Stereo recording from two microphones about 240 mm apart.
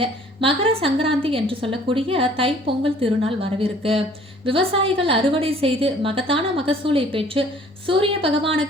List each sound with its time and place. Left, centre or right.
0.0 s a woman's voice: right